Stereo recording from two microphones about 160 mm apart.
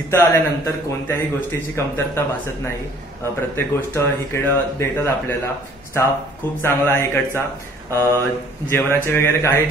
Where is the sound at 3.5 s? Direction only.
15° left (ahead or behind).